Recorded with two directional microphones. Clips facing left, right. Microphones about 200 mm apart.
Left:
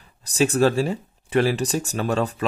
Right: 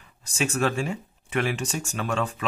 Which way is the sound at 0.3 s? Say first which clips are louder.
Left 7 dB; 35° left (ahead or behind).